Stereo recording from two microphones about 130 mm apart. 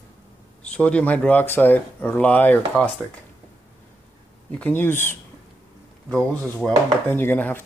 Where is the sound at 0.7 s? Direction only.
10° left (ahead or behind).